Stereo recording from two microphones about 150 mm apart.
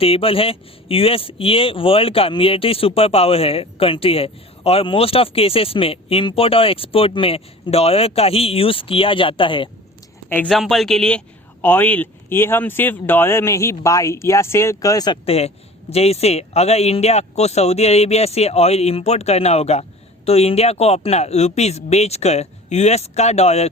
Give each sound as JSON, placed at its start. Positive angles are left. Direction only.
{"t": 0.0, "sound": "speech", "side_deg": 40}
{"t": 10.2, "sound": "speech", "side_deg": 10}
{"t": 10.5, "sound": "speech", "side_deg": 0}
{"t": 15.3, "sound": "speech", "side_deg": 45}